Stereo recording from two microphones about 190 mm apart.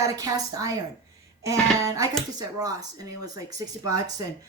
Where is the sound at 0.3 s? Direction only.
20° right (ahead or behind).